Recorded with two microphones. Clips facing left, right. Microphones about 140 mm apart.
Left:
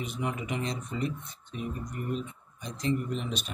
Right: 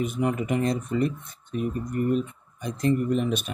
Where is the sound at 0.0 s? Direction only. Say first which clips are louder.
Right 8 dB; 50° right (ahead or behind).